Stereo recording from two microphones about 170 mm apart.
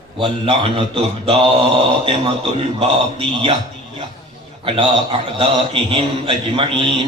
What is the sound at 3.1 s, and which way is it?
Speech, 30° right (ahead or behind).